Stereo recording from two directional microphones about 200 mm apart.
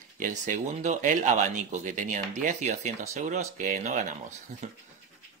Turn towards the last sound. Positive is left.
turn(degrees=-35)  # may be behind; listen again after turning